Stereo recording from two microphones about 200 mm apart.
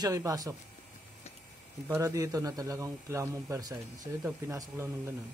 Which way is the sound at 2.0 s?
15° right (ahead or behind).